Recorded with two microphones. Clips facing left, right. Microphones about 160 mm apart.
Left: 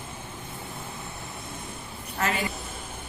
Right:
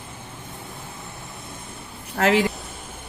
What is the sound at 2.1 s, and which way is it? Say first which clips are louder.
Speech: right 9 dB; 80° right.